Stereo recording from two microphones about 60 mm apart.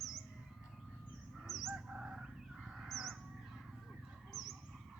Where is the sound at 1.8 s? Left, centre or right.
Centre.